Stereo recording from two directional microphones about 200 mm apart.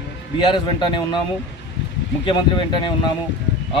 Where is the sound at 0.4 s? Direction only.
25° left (ahead or behind).